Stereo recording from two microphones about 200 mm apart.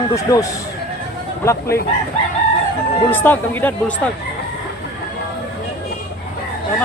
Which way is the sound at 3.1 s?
10° left (ahead or behind).